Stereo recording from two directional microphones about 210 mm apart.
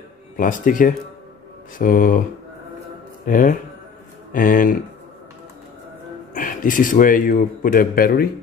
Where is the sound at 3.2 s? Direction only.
40° left (ahead or behind).